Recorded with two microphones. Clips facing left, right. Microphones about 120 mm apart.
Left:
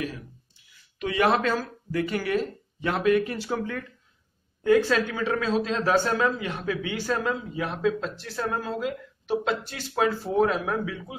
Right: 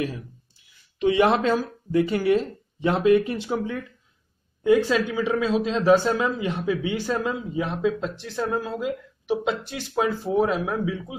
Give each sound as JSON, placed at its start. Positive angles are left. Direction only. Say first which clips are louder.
{"t": 0.9, "sound": "speech", "louder": "right 4 dB", "side_deg": -25}